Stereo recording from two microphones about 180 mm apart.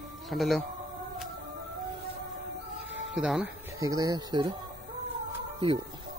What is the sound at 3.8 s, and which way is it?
Speech, 20° right (ahead or behind).